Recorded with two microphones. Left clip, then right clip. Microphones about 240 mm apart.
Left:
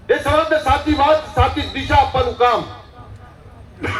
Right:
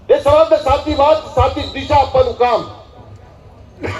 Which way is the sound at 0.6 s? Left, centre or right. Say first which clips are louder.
Right 2 dB; left.